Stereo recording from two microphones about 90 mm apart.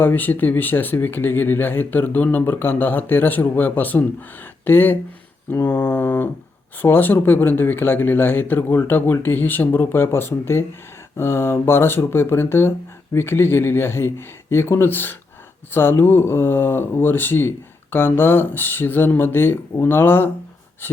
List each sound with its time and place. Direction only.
0.0 s speech: 20° left (ahead or behind)